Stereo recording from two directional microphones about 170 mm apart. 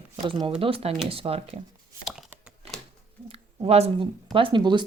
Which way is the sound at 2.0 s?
Centre (ahead or behind).